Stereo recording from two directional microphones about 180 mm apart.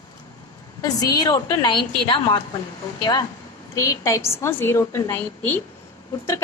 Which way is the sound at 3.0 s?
20° left (ahead or behind).